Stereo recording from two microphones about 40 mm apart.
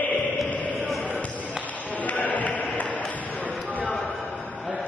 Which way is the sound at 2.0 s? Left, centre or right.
Left.